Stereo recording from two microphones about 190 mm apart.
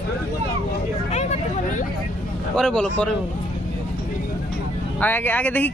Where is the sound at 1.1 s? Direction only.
35° left (ahead or behind).